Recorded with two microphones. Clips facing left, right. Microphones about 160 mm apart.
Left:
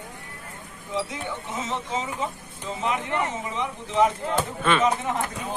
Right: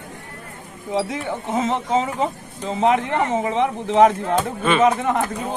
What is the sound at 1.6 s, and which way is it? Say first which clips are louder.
Speech: right 10 dB; 55° right (ahead or behind).